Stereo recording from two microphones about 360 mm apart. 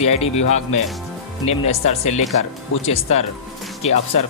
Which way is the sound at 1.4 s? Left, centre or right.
Left.